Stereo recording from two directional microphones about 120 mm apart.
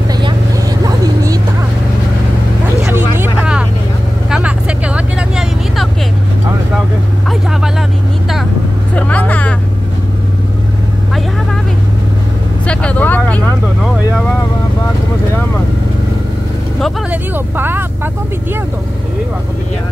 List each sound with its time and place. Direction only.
0.8 s a sound: 30° right (ahead or behind)
2.9 s vehicle: 20° right (ahead or behind)
4.3 s vehicle: 10° right (ahead or behind)
8.9 s vehicle: 15° left (ahead or behind)
12.6 s vehicle: 10° left (ahead or behind)
17.1 s vehicle: 15° right (ahead or behind)